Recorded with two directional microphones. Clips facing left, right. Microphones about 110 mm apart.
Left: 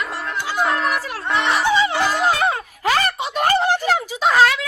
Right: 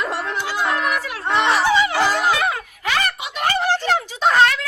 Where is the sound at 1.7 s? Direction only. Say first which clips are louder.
Even; 20° left (ahead or behind).